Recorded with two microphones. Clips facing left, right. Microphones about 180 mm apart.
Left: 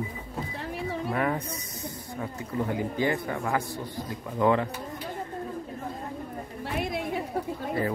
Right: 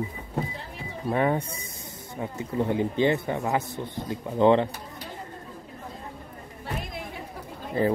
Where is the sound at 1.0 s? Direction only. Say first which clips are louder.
Right 6 dB; 30° right (ahead or behind).